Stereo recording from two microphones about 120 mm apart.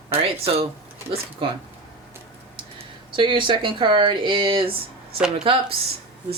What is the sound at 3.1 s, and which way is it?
Speech, 45° right (ahead or behind).